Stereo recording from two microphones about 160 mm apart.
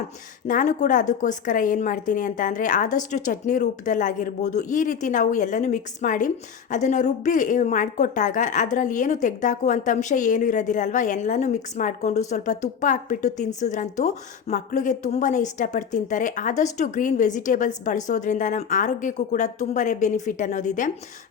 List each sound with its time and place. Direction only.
0.4 s a woman's voice: 50° left (ahead or behind)